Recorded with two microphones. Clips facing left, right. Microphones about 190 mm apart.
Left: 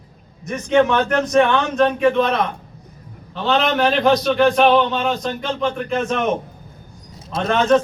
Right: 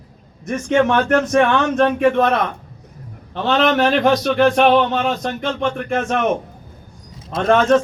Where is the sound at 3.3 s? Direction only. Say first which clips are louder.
Right 2 dB; 50° right (ahead or behind).